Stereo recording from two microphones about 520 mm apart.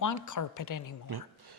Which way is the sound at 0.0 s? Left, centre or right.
Left.